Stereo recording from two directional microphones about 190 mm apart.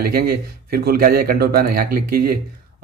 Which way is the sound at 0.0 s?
55° right (ahead or behind).